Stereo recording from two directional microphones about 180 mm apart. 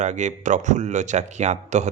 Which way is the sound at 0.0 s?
40° right (ahead or behind).